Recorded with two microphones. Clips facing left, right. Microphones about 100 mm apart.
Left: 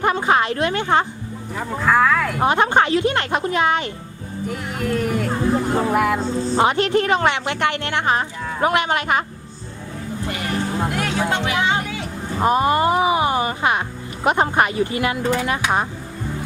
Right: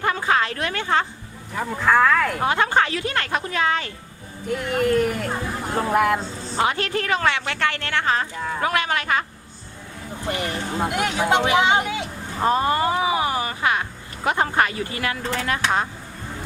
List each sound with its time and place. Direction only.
0.0 s a sound: 20° left (ahead or behind)
1.8 s speech: centre (ahead or behind)
2.4 s a woman's voice: 20° left (ahead or behind)
4.4 s speech: centre (ahead or behind)
6.6 s a woman's voice: 25° left (ahead or behind)
8.4 s speech: centre (ahead or behind)
8.6 s a woman's voice: 25° left (ahead or behind)
10.2 s speech: 20° right (ahead or behind)
12.4 s a woman's voice: 15° left (ahead or behind)